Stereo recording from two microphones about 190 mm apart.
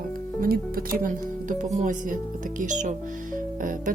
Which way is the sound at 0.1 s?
50° right (ahead or behind).